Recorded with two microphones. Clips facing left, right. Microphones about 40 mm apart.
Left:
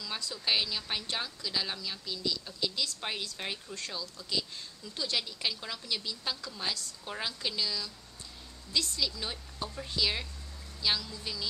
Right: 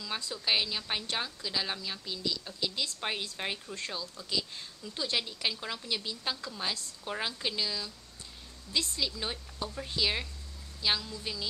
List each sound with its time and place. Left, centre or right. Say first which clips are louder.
0.3 s speech: even; centre